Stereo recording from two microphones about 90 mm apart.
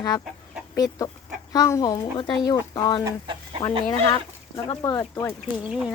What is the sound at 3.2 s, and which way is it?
Chicken, 60° right (ahead or behind).